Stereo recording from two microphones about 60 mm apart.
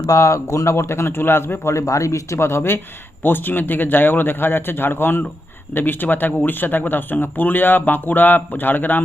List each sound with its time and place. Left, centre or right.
0.0 s a man's voice: left
1.7 s a man's voice: left